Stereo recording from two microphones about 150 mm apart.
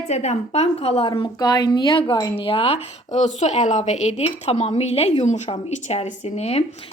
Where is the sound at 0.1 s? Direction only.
50° left (ahead or behind).